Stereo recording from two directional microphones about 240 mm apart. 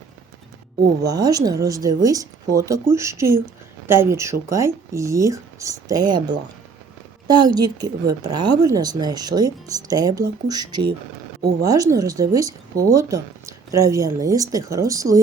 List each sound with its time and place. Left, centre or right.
1.0 s speech: centre